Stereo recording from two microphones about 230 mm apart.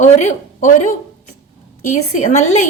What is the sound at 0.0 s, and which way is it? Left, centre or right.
Speech, left.